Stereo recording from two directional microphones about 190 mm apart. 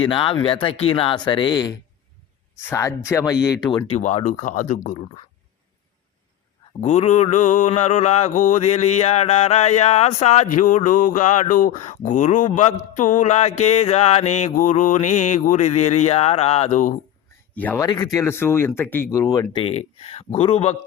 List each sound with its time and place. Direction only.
0.0 s speech: 25° left (ahead or behind)
3.8 s mantra: 35° left (ahead or behind)
6.8 s mantra: 35° left (ahead or behind)
17.5 s speech: 10° left (ahead or behind)
17.8 s speech: 20° left (ahead or behind)
19.6 s mantra: 30° left (ahead or behind)